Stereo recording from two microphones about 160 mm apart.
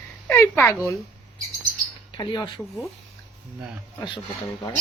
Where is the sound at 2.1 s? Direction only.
25° left (ahead or behind).